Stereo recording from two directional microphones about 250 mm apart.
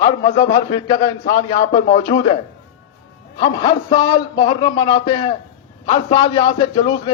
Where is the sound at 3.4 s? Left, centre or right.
Centre.